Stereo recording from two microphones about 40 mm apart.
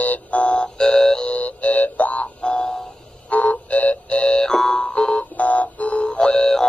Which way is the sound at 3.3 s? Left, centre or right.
Left.